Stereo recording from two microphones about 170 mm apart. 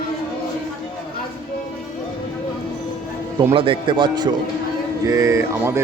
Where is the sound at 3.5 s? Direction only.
30° right (ahead or behind).